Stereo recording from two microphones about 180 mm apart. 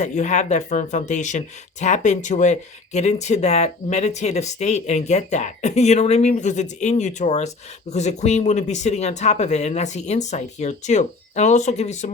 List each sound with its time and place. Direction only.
0.0 s speech: 40° left (ahead or behind)